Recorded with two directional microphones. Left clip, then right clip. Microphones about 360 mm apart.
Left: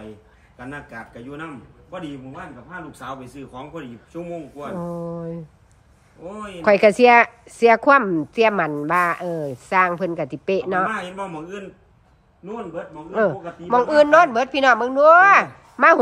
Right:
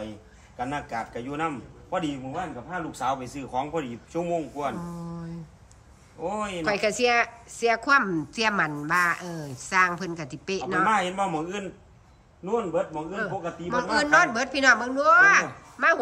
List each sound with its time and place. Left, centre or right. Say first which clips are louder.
1.3 s a man's voice: right 5 dB; centre
4.8 s a woman's voice: left 11 dB; centre
6.6 s a woman's voice: left 12 dB; centre
11.3 s a man's voice: right 2 dB; right
13.1 s a woman's voice: left 9 dB; centre